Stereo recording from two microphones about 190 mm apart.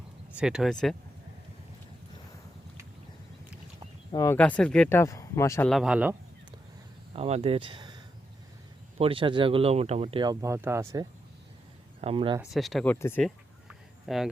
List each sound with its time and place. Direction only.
0.3 s speech: 5° right (ahead or behind)
4.1 s speech: 20° left (ahead or behind)
4.4 s speech: 5° left (ahead or behind)
5.6 s speech: centre (ahead or behind)
7.1 s speech: 30° right (ahead or behind)
9.0 s speech: 30° right (ahead or behind)
10.4 s speech: 15° right (ahead or behind)
11.9 s speech: 30° right (ahead or behind)
12.4 s speech: centre (ahead or behind)
13.2 s a sound: centre (ahead or behind)